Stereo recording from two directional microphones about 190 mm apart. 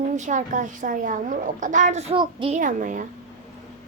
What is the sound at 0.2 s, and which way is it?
A woman's voice, 40° right (ahead or behind).